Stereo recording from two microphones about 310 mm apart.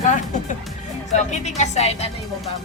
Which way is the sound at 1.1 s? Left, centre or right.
Left.